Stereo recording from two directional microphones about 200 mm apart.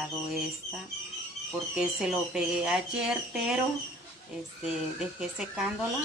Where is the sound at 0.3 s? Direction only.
5° right (ahead or behind).